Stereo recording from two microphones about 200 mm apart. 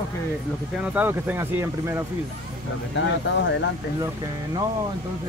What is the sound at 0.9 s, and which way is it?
Speech, 10° right (ahead or behind).